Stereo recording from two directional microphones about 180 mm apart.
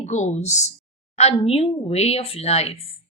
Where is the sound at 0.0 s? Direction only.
40° left (ahead or behind).